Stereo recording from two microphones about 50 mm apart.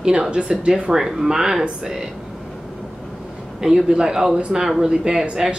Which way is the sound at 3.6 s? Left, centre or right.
Centre.